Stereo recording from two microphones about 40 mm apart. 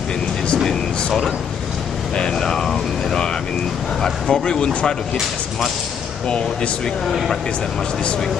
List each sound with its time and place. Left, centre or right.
0.7 s speech: centre
6.2 s speech: left
7.1 s speech: centre